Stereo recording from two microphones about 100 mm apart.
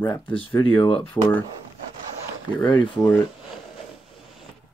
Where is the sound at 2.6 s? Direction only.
55° left (ahead or behind).